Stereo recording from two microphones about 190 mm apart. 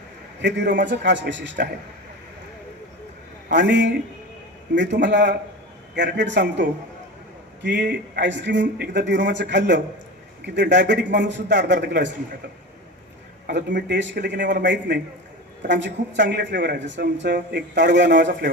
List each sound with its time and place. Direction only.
0.4 s a man's voice: 65° right (ahead or behind)
3.5 s a man's voice: 70° right (ahead or behind)
13.5 s speech: 65° right (ahead or behind)